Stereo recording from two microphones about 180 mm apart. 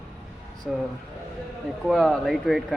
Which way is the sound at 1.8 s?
Centre (ahead or behind).